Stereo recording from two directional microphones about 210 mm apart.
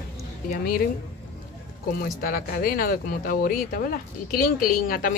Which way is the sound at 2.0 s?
45° left (ahead or behind).